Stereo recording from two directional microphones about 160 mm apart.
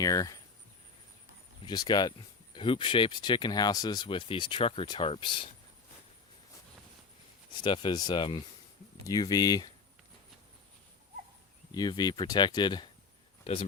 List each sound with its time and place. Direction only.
0.0 s speech: 20° left (ahead or behind)
1.6 s speech: 25° left (ahead or behind)
7.6 s speech: 30° left (ahead or behind)
11.7 s speech: 25° left (ahead or behind)